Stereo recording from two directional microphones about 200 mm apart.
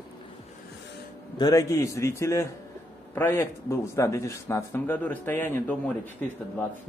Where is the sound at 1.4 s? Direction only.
15° left (ahead or behind).